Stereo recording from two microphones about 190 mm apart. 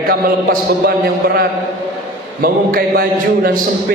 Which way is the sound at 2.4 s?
50° right (ahead or behind).